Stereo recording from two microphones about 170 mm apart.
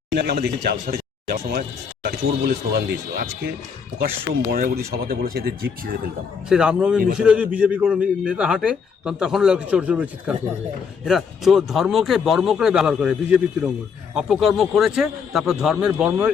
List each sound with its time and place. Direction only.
0.2 s speech: 70° right (ahead or behind)
4.5 s speech: 60° right (ahead or behind)
6.5 s a man's voice: 5° right (ahead or behind)